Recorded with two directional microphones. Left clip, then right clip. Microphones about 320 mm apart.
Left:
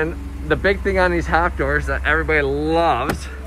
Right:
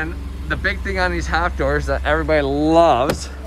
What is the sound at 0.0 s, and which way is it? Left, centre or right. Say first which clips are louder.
Speech: left 4 dB; centre.